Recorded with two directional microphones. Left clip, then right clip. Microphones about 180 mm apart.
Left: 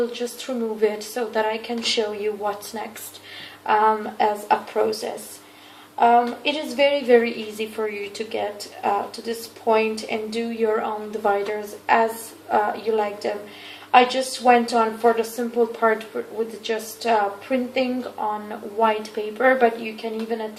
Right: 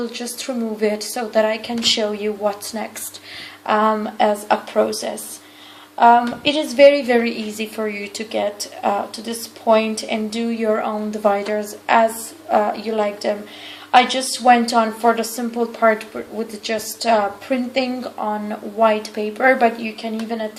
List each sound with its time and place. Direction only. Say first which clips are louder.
0.8 s a woman's voice: right 2 dB; 45° right (ahead or behind)